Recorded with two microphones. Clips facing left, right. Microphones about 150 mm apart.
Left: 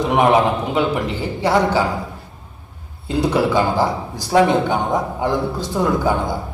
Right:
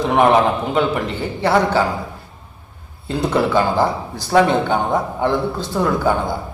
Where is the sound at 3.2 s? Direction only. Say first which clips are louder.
Even; 10° left (ahead or behind).